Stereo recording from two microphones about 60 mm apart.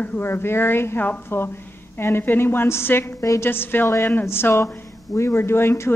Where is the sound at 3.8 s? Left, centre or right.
Left.